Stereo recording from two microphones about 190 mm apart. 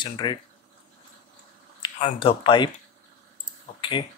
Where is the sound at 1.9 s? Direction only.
35° left (ahead or behind).